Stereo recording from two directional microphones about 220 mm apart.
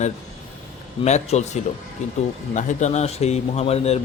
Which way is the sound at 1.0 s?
30° left (ahead or behind).